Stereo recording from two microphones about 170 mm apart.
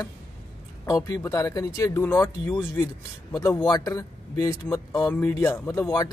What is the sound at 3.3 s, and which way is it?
A man's voice, 20° left (ahead or behind).